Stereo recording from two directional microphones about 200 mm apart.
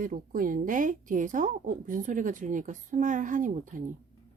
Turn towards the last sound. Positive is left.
turn(degrees=-40)  # may be behind; listen again after turning